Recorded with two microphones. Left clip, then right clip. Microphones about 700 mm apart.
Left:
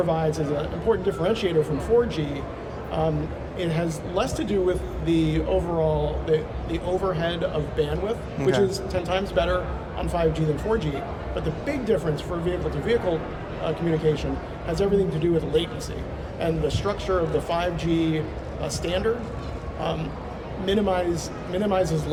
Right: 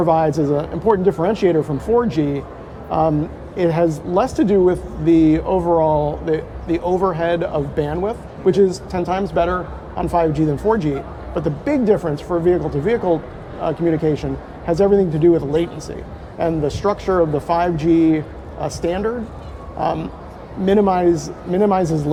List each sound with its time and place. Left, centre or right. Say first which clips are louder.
0.1 s speech: right 8 dB; right